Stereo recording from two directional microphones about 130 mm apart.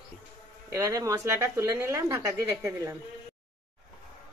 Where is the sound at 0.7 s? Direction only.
25° right (ahead or behind).